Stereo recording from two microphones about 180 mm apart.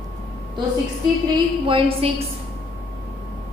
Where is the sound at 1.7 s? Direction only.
30° right (ahead or behind).